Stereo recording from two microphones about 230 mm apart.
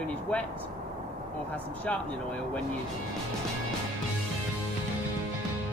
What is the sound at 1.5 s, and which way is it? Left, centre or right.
Speech, centre.